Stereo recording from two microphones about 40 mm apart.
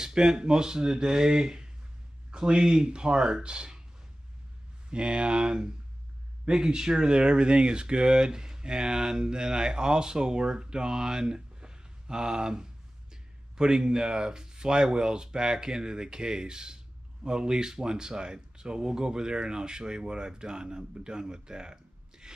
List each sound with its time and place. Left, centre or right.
0.0 s speech: centre
4.8 s speech: right